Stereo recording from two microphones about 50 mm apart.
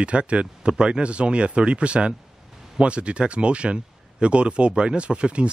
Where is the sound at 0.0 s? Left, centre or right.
Right.